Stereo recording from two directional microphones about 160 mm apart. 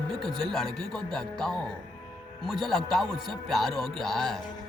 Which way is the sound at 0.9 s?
5° left (ahead or behind).